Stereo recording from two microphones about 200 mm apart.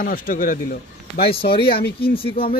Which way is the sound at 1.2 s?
30° left (ahead or behind).